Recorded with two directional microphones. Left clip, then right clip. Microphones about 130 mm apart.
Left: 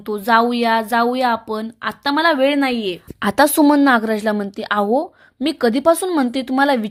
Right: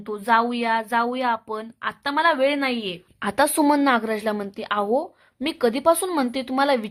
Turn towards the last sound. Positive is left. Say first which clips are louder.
# left 4 dB
turn(degrees=25)  # may be behind; listen again after turning